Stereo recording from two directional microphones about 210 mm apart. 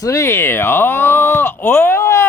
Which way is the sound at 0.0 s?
15° left (ahead or behind).